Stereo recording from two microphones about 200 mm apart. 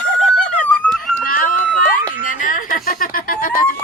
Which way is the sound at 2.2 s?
40° left (ahead or behind).